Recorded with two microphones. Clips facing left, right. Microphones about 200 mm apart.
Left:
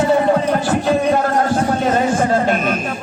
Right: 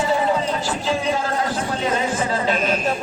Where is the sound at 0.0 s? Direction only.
60° left (ahead or behind).